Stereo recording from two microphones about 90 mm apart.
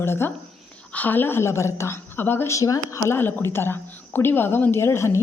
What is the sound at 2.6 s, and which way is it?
Speech, 40° left (ahead or behind).